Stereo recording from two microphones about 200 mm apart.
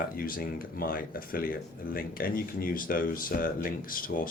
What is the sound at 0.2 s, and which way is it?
Speech, 45° left (ahead or behind).